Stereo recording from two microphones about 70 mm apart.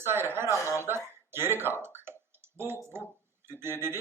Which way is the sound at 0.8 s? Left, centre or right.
Right.